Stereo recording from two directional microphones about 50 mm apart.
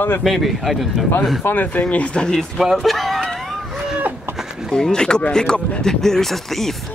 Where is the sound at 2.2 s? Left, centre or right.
Centre.